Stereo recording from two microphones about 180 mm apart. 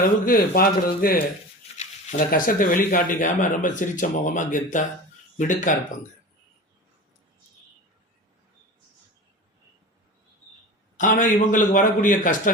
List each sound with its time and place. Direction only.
0.3 s speech: 55° left (ahead or behind)
1.8 s speech: 40° left (ahead or behind)
10.9 s speech: 45° left (ahead or behind)